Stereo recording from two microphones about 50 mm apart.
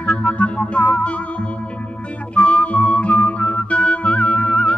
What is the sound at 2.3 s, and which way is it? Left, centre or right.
Music, left.